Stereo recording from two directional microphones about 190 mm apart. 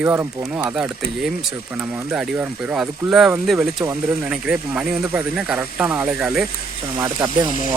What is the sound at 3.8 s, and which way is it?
Speech, 15° right (ahead or behind).